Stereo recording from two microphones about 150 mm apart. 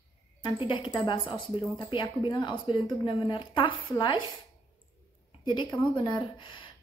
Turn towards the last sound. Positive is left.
turn(degrees=35)  # may be behind; listen again after turning